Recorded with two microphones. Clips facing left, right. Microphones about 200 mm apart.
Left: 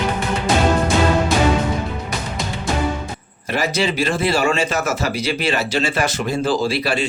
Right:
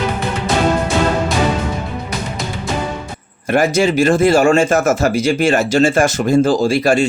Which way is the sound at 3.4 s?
50° right (ahead or behind).